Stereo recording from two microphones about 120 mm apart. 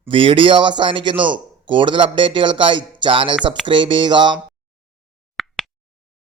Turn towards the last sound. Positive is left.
turn(degrees=0)  # may be behind; listen again after turning